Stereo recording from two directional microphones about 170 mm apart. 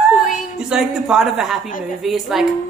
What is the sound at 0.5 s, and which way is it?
Speech, centre (ahead or behind).